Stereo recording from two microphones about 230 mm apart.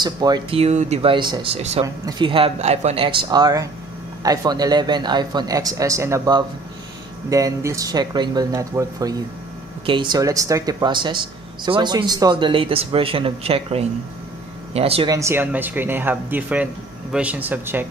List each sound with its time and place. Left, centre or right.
0.0 s speech: centre
15.1 s speech: centre